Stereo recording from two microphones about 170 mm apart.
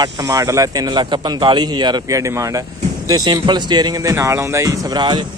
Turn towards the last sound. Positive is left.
turn(degrees=-25)  # may be behind; listen again after turning